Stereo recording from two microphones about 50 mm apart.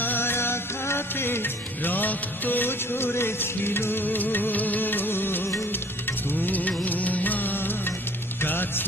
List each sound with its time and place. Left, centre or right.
0.0 s music: left